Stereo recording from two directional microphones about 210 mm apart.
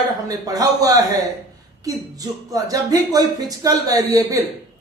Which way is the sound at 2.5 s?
15° right (ahead or behind).